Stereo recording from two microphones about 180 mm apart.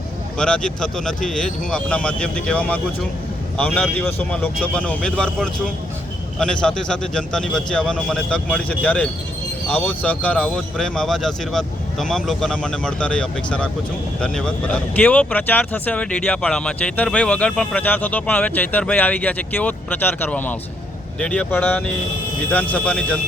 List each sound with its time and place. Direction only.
0.3 s speech: 5° left (ahead or behind)